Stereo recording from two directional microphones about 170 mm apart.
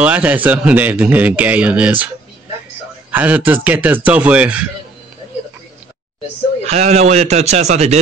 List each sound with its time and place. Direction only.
0.0 s speech: 10° right (ahead or behind)
3.1 s speech: 10° right (ahead or behind)
6.6 s a man's voice: 40° right (ahead or behind)